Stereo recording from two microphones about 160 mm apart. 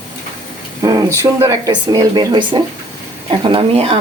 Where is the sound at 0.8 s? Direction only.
25° right (ahead or behind).